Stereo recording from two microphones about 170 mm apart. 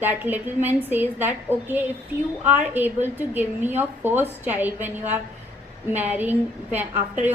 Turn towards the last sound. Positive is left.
turn(degrees=-10)  # may be behind; listen again after turning